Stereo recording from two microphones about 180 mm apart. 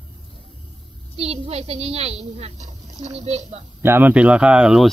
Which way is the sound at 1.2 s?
35° right (ahead or behind).